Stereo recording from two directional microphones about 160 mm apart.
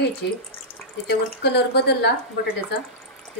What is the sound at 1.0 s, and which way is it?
A woman's voice, 90° left.